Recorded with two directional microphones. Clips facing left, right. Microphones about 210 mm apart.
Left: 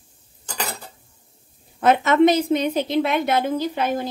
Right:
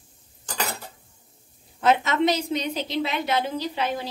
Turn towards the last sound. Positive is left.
turn(degrees=50)  # may be behind; listen again after turning